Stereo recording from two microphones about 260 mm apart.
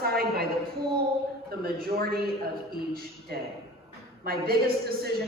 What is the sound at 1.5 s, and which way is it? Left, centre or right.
Speech, right.